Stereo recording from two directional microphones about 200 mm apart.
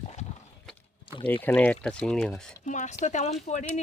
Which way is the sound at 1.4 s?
5° left (ahead or behind).